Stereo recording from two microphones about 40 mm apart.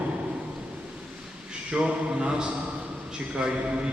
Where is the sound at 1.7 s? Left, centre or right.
Right.